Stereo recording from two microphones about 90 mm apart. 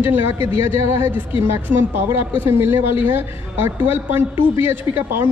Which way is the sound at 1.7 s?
20° right (ahead or behind).